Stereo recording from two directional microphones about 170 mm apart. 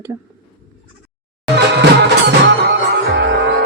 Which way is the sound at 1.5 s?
85° right.